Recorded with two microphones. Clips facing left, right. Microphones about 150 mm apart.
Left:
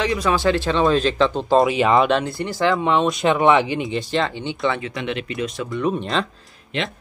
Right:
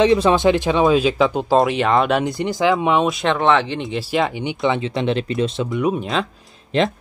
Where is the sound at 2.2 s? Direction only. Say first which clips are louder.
Right 3 dB; 15° right (ahead or behind).